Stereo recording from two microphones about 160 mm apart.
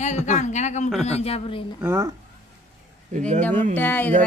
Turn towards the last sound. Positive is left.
turn(degrees=10)  # may be behind; listen again after turning